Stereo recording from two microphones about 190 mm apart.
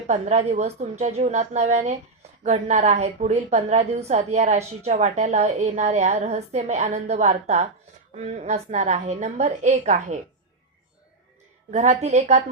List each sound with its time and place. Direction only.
0.1 s a woman's voice: 40° right (ahead or behind)
11.7 s a woman's voice: 35° right (ahead or behind)